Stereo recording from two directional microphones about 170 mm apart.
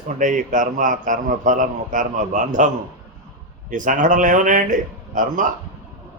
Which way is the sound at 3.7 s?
50° right (ahead or behind).